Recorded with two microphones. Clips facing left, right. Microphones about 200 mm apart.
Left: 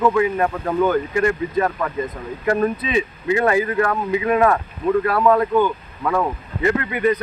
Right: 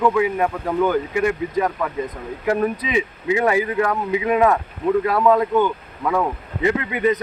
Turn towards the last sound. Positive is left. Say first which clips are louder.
# left 1 dB
turn(degrees=-20)  # may be behind; listen again after turning